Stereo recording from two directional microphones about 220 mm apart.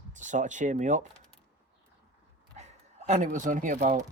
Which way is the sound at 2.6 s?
30° right (ahead or behind).